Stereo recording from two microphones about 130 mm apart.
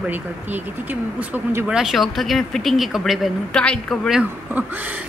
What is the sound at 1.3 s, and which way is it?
Speech, 15° right (ahead or behind).